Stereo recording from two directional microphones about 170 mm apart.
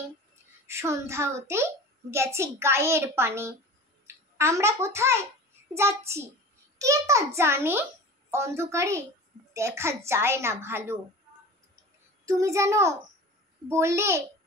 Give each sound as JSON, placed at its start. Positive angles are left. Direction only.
{"t": 0.7, "sound": "a child's voice", "side_deg": -15}
{"t": 12.3, "sound": "a child's voice", "side_deg": -20}